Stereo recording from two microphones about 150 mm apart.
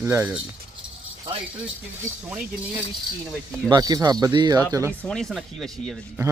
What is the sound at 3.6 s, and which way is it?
Speech, 25° right (ahead or behind).